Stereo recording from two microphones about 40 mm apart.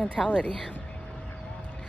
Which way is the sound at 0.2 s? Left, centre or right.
Centre.